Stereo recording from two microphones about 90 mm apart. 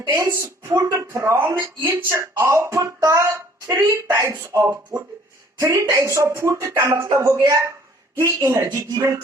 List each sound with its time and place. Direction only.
0.2 s a woman's voice: 35° right (ahead or behind)